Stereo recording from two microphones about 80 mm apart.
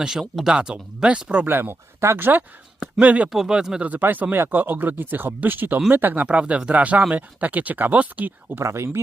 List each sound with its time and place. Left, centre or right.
0.0 s speech: centre
1.5 s speech: right
3.3 s speech: centre
3.8 s speech: right
8.6 s speech: right